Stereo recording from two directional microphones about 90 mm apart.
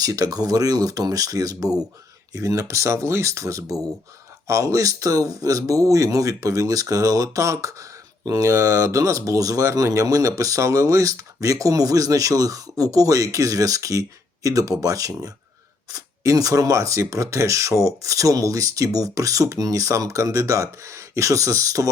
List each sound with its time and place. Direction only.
0.0 s speech: 45° right (ahead or behind)